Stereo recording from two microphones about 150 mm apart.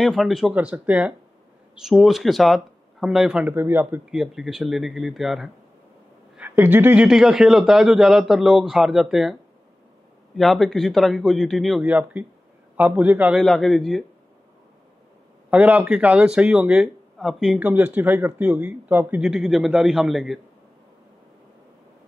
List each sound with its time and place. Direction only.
0.0 s a man's voice: centre (ahead or behind)
4.1 s a man's voice: centre (ahead or behind)
6.3 s a man's voice: 15° right (ahead or behind)
13.4 s a man's voice: centre (ahead or behind)
15.5 s speech: 10° right (ahead or behind)
19.2 s a man's voice: centre (ahead or behind)